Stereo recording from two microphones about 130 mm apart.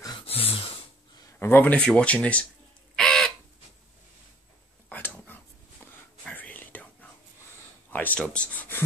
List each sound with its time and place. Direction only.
0.2 s gasp: 45° left (ahead or behind)
1.4 s speech: 15° left (ahead or behind)
3.0 s bird: 5° left (ahead or behind)
4.8 s a sound: 10° left (ahead or behind)
6.2 s whispering: 10° left (ahead or behind)
7.9 s speech: 15° left (ahead or behind)